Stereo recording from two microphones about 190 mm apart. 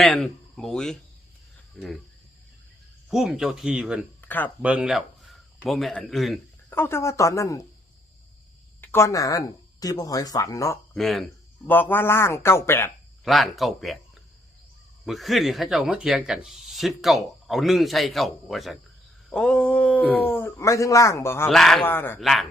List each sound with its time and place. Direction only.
0.0 s speech: centre (ahead or behind)
1.7 s cricket: centre (ahead or behind)
3.1 s speech: 5° right (ahead or behind)
4.2 s a sound: 10° left (ahead or behind)
4.6 s speech: 5° right (ahead or behind)
6.7 s a man's voice: 10° left (ahead or behind)
8.8 s speech: 15° left (ahead or behind)
10.9 s a man's voice: centre (ahead or behind)
13.2 s speech: centre (ahead or behind)
15.0 s a man's voice: centre (ahead or behind)
21.5 s a man's voice: centre (ahead or behind)
22.2 s speech: centre (ahead or behind)